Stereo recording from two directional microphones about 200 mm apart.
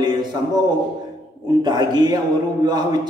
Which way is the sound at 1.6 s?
20° right (ahead or behind).